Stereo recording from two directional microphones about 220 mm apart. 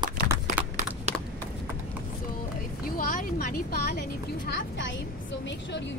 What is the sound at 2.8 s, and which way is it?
A woman's voice, 40° left (ahead or behind).